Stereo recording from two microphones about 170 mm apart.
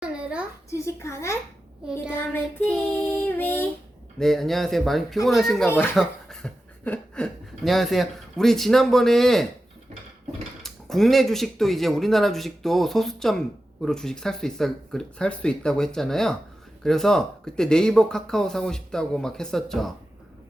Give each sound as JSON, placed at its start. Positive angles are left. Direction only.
{"t": 0.0, "sound": "a sound", "side_deg": -5}
{"t": 0.7, "sound": "a child's voice", "side_deg": 15}
{"t": 1.9, "sound": "speech", "side_deg": -5}
{"t": 2.1, "sound": "a child's voice", "side_deg": 10}
{"t": 3.0, "sound": "child singing", "side_deg": 10}
{"t": 4.2, "sound": "speech", "side_deg": 0}
{"t": 10.6, "sound": "speech", "side_deg": 0}